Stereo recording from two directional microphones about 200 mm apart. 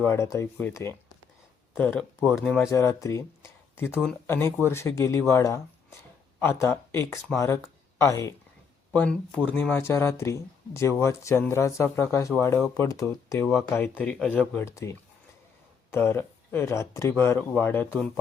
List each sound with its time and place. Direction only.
0.0 s speech: 15° left (ahead or behind)